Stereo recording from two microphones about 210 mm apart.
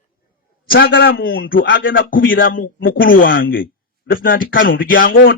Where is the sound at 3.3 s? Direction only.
65° left (ahead or behind).